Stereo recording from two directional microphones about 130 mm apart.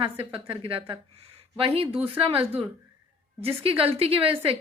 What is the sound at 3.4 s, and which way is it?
Speech, 45° right (ahead or behind).